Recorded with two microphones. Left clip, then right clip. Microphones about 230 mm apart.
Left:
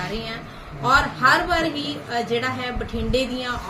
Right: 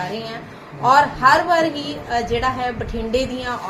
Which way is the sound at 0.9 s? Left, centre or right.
Centre.